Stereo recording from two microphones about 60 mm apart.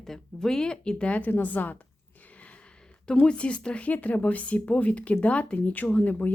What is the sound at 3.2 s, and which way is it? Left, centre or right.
A woman's voice, centre.